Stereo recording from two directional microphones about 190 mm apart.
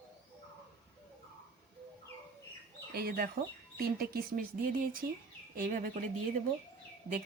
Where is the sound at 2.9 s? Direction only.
55° right (ahead or behind).